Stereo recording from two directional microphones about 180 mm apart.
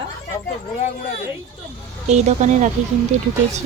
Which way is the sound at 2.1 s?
40° right (ahead or behind).